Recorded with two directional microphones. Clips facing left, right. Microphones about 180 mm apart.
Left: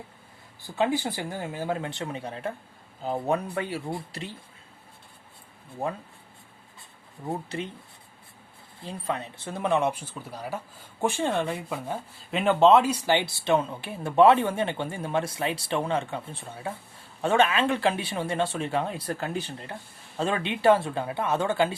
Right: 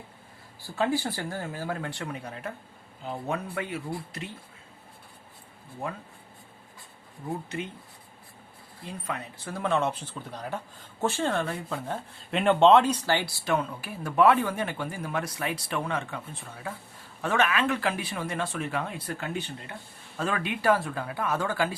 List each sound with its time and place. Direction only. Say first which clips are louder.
0.6 s speech: left 1 dB; 20° left (ahead or behind)
7.3 s speech: left 2 dB; 30° left (ahead or behind)
8.8 s speech: left 4 dB; 30° left (ahead or behind); by 11.9 s 15° left (ahead or behind)
12.3 s speech: even; centre (ahead or behind); by 21.8 s 25° left (ahead or behind)